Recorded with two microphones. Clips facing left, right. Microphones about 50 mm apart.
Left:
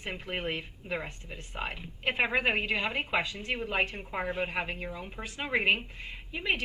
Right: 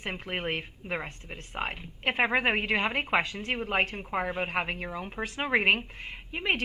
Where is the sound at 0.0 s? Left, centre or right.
Right.